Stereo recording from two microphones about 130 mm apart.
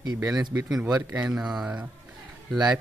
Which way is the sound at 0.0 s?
30° right (ahead or behind).